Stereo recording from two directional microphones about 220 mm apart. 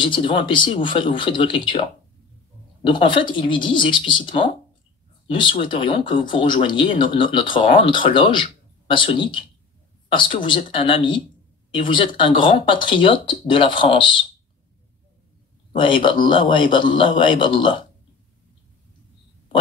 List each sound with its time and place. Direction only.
0.0 s speech: 20° left (ahead or behind)
2.8 s speech: 20° left (ahead or behind)
15.7 s speech: 20° left (ahead or behind)